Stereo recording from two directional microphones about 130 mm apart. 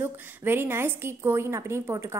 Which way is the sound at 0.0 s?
15° right (ahead or behind).